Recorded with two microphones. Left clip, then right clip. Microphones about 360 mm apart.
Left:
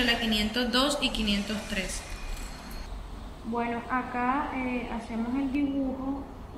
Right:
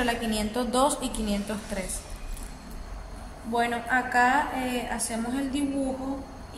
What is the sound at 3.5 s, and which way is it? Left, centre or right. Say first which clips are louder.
Speech: right 5 dB; right.